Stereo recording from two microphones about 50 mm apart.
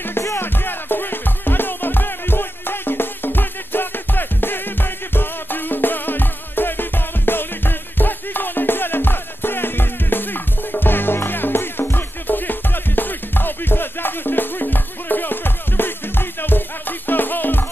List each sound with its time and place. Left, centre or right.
0.4 s music: left